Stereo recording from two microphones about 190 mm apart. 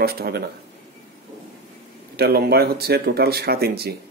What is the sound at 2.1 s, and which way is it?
Speech, 55° right (ahead or behind).